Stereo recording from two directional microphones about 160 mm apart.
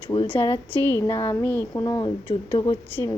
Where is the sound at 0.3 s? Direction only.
35° left (ahead or behind).